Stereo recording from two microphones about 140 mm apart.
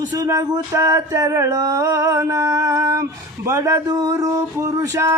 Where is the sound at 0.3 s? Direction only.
25° right (ahead or behind).